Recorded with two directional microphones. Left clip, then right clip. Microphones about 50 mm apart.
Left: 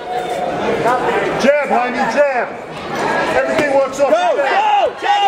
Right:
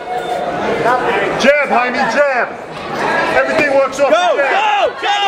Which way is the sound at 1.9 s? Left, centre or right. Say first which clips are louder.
Right 1 dB; right.